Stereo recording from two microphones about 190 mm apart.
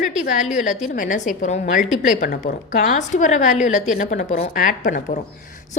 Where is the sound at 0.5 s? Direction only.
40° left (ahead or behind).